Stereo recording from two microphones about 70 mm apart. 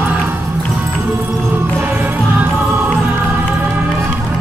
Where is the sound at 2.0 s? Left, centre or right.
Right.